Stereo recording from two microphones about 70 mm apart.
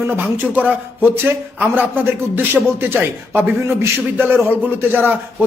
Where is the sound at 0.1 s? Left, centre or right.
Right.